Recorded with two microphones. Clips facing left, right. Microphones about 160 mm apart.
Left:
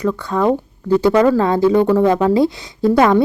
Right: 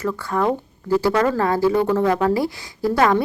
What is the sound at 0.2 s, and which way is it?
A woman's voice, 20° left (ahead or behind).